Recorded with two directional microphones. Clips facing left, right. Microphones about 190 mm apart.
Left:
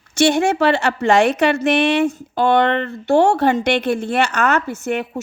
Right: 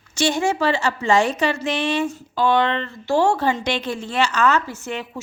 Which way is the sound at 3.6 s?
65° left (ahead or behind).